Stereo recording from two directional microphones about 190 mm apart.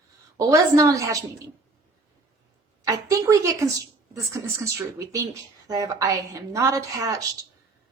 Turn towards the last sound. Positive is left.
turn(degrees=-15)  # may be behind; listen again after turning